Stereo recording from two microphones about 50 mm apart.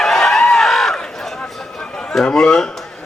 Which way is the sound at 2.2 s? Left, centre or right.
Centre.